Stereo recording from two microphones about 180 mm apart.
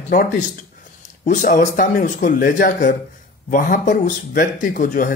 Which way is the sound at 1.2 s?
50° left (ahead or behind).